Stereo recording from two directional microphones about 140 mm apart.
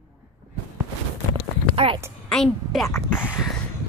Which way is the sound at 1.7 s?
40° right (ahead or behind).